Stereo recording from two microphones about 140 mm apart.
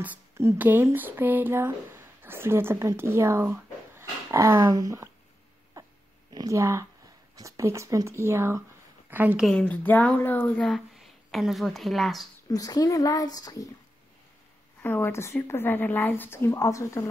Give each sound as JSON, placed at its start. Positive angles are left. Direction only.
{"t": 0.0, "sound": "speech", "side_deg": -20}
{"t": 5.8, "sound": "dog", "side_deg": -20}
{"t": 6.3, "sound": "a woman's voice", "side_deg": -25}
{"t": 9.5, "sound": "speech", "side_deg": 10}
{"t": 12.4, "sound": "speech", "side_deg": 25}
{"t": 14.8, "sound": "a woman's voice", "side_deg": 15}